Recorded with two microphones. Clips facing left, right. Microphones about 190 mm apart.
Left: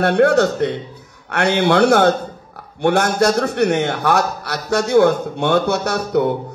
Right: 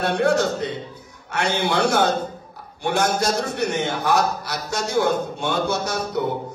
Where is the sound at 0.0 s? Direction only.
65° left (ahead or behind).